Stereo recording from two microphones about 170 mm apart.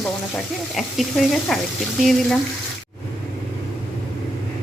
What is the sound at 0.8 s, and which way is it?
A woman's voice, centre (ahead or behind).